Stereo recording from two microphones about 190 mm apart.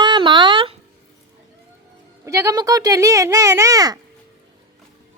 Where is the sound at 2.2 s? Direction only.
15° right (ahead or behind).